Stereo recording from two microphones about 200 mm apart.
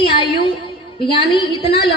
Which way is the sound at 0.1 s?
25° left (ahead or behind).